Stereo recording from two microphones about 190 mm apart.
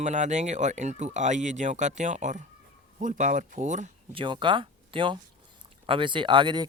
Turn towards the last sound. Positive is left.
turn(degrees=-25)  # may be behind; listen again after turning